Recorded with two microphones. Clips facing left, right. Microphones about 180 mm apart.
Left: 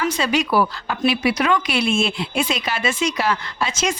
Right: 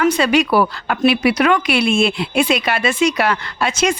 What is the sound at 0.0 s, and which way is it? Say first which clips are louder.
Speech: right 6 dB; 60° right (ahead or behind).